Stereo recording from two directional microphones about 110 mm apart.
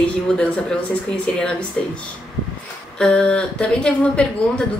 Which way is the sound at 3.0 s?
5° left (ahead or behind).